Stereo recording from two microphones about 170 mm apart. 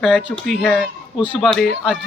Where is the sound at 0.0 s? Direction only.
5° right (ahead or behind).